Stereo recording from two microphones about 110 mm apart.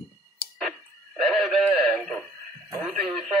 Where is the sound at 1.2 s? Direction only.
Centre (ahead or behind).